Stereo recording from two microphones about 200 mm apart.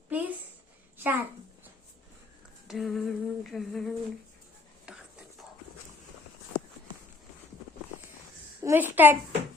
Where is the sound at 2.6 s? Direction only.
Centre (ahead or behind).